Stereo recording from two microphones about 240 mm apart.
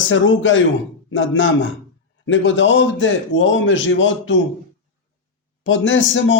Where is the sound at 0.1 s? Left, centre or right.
Left.